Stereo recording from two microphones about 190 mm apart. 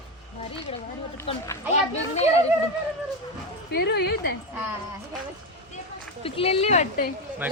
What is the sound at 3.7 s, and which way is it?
Speech, 60° left (ahead or behind).